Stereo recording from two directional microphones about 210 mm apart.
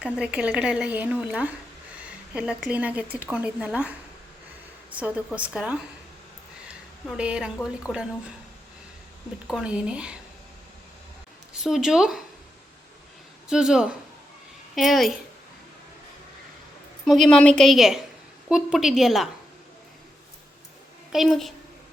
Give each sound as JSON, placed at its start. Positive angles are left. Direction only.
{"t": 0.0, "sound": "speech", "side_deg": -5}
{"t": 4.9, "sound": "speech", "side_deg": -5}
{"t": 9.5, "sound": "speech", "side_deg": -5}
{"t": 11.5, "sound": "speech", "side_deg": 0}
{"t": 13.5, "sound": "speech", "side_deg": 0}
{"t": 17.1, "sound": "speech", "side_deg": 0}
{"t": 21.1, "sound": "a woman's voice", "side_deg": 0}